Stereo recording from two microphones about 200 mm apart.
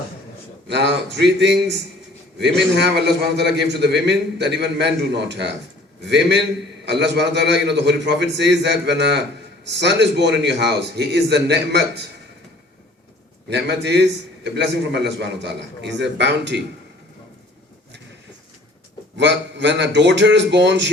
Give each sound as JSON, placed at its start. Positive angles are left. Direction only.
{"t": 0.7, "sound": "a man's voice", "side_deg": -60}
{"t": 13.5, "sound": "a man's voice", "side_deg": -55}
{"t": 19.1, "sound": "a man's voice", "side_deg": -60}